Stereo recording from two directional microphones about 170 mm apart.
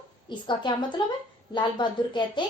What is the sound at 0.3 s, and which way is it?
A woman's voice, 25° left (ahead or behind).